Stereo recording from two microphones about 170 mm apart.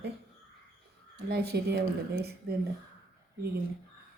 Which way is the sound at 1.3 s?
70° right (ahead or behind).